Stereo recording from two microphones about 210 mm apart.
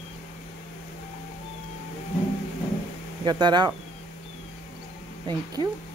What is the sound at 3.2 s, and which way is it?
Speech, 20° right (ahead or behind).